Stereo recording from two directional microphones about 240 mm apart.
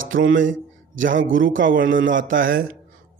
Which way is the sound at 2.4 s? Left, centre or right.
Right.